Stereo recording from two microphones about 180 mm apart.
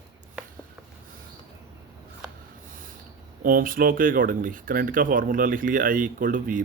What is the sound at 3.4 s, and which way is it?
Speech, 50° right (ahead or behind).